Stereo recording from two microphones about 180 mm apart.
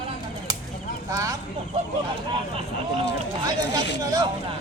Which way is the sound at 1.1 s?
20° right (ahead or behind).